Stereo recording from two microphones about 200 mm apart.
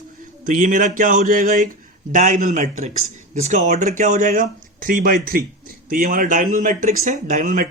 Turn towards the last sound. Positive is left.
turn(degrees=-40)  # may be behind; listen again after turning